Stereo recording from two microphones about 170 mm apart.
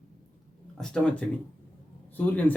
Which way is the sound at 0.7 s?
5° left (ahead or behind).